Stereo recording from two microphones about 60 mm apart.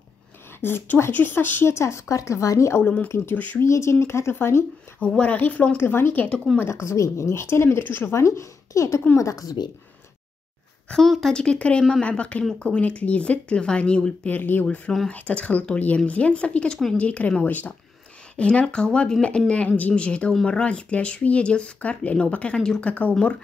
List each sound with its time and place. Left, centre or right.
0.6 s a woman's voice: left
1.1 s a woman's voice: left
1.7 s speech: left
2.8 s speech: left
3.6 s speech: left
5.0 s speech: left
5.8 s a woman's voice: left
6.7 s a woman's voice: left
8.1 s speech: left
9.2 s speech: left
11.1 s speech: centre
11.3 s speech: centre
14.3 s a woman's voice: left
15.0 s speech: left